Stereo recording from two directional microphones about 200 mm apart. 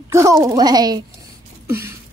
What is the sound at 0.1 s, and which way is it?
Speech, 15° right (ahead or behind).